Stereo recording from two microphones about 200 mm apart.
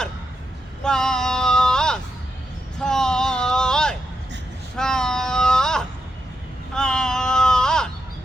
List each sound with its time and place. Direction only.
0.9 s child singing: 5° left (ahead or behind)
2.7 s a sound: 5° left (ahead or behind)
6.7 s baby cry: 5° left (ahead or behind)